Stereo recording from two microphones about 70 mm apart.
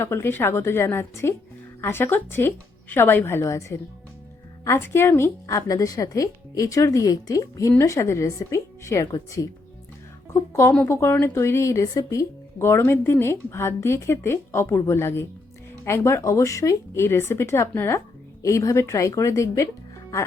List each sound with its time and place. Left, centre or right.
0.0 s a woman's voice: left
3.4 s a woman's voice: left
7.8 s a woman's voice: left
10.3 s a woman's voice: left
18.4 s a woman's voice: left